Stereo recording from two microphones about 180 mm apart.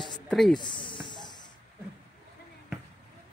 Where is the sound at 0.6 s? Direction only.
25° left (ahead or behind).